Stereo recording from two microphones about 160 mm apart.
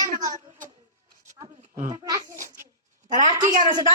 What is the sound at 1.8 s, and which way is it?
Speech, 20° right (ahead or behind).